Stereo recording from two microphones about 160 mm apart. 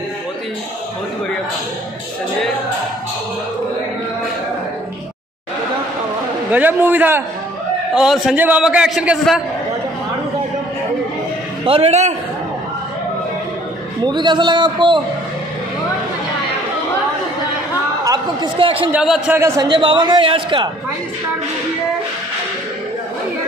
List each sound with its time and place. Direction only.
6.5 s a man's voice: 10° right (ahead or behind)
11.6 s a man's voice: 35° right (ahead or behind)
14.0 s a man's voice: 30° right (ahead or behind)
18.0 s a man's voice: 25° right (ahead or behind)
18.9 s a man's voice: 5° right (ahead or behind)
19.3 s a man's voice: 20° right (ahead or behind)